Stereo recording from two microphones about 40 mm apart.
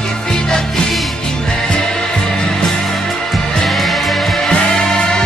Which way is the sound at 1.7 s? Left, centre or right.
Centre.